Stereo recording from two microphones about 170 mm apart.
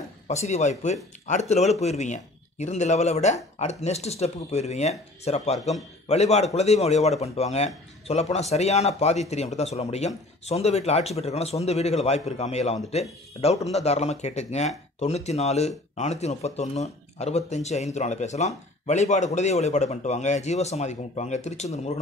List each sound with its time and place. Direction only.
0.3 s speech: 40° left (ahead or behind)